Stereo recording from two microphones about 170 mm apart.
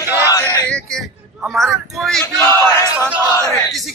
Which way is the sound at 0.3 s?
15° left (ahead or behind).